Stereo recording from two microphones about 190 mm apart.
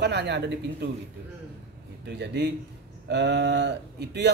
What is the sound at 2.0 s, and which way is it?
Speech, 65° right (ahead or behind).